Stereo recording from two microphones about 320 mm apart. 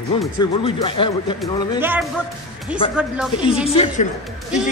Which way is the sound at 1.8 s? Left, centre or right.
Centre.